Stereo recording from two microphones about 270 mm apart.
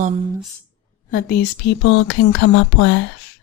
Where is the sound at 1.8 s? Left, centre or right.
Left.